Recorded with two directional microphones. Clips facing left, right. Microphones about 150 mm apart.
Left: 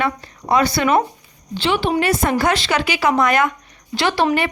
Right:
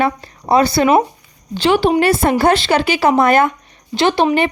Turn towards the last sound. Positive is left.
turn(degrees=-20)  # may be behind; listen again after turning